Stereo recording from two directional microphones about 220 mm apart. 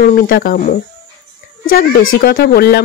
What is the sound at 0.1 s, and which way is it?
Speech, 40° left (ahead or behind).